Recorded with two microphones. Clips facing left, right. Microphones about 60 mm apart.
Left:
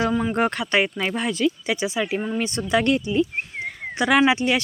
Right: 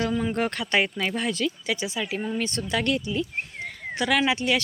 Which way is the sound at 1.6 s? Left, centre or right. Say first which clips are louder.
Left 4 dB; left.